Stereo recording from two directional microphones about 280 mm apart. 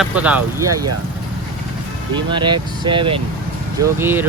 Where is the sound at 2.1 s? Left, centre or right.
Centre.